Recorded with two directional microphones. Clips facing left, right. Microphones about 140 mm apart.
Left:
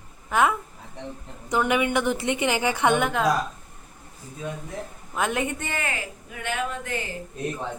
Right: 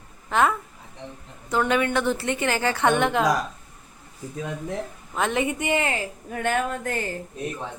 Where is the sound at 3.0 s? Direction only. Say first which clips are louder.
Right 2 dB; centre (ahead or behind).